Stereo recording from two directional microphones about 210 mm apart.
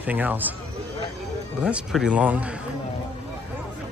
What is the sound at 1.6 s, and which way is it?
Speech, 5° right (ahead or behind).